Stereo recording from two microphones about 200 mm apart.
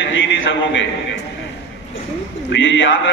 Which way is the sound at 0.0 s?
65° left (ahead or behind).